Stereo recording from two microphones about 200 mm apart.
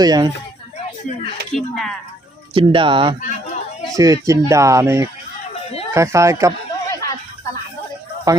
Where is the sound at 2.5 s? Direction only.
25° right (ahead or behind).